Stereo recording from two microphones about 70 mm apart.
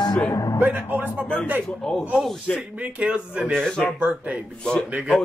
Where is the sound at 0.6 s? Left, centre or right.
Right.